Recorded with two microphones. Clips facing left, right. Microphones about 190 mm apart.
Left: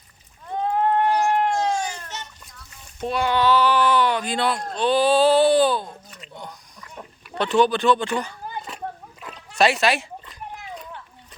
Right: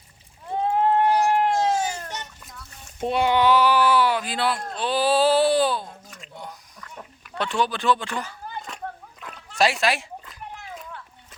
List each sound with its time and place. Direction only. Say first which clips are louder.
0.4 s goat: even; 25° right (ahead or behind)
3.0 s a sound: right 1 dB; 25° right (ahead or behind); by 6.6 s 5° right (ahead or behind)
7.3 s speech: left 6 dB; centre (ahead or behind)